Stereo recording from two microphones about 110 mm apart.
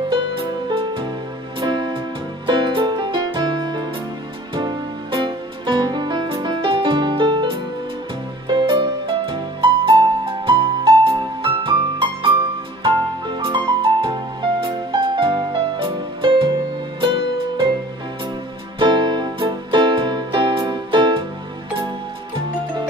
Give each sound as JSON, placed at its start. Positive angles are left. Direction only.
{"t": 0.7, "sound": "music", "side_deg": -50}
{"t": 5.1, "sound": "music", "side_deg": -45}
{"t": 18.8, "sound": "music", "side_deg": -45}